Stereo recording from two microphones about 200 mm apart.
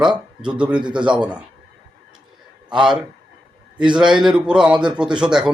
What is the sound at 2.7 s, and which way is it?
A man's voice, 5° right (ahead or behind).